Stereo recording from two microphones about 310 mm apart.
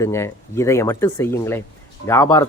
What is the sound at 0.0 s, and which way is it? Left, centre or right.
Speech, centre.